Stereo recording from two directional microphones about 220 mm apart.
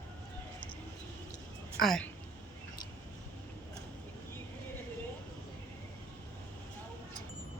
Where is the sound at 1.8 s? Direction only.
5° left (ahead or behind).